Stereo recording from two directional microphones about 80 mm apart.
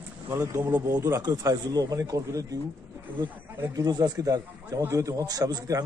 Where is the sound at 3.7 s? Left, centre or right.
Right.